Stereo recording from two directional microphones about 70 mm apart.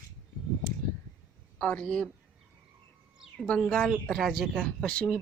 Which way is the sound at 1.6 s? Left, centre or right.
Centre.